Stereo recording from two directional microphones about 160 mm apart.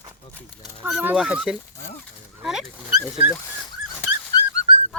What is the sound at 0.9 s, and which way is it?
Speech, 5° right (ahead or behind).